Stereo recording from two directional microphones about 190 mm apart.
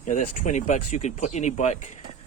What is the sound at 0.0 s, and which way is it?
Speech, 40° left (ahead or behind).